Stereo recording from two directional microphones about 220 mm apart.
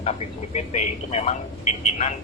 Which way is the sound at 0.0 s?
30° left (ahead or behind).